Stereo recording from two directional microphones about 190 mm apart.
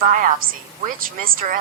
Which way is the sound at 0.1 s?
45° right (ahead or behind).